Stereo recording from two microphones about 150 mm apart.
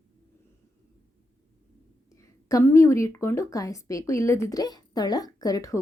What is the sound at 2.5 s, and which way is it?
Speech, 20° left (ahead or behind).